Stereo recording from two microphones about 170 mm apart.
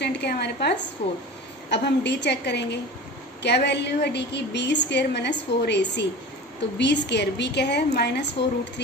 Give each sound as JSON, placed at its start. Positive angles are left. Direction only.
{"t": 0.0, "sound": "a woman's voice", "side_deg": 80}
{"t": 1.7, "sound": "a woman's voice", "side_deg": 90}